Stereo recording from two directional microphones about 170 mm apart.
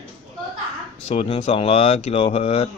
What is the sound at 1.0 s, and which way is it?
Speech, 35° left (ahead or behind).